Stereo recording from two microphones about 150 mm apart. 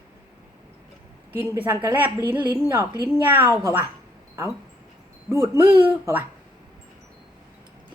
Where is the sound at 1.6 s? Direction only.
15° right (ahead or behind).